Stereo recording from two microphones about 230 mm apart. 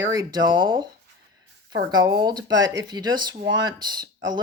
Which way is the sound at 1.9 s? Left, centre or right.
Centre.